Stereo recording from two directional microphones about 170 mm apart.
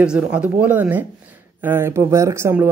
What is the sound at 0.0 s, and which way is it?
Speech, 5° right (ahead or behind).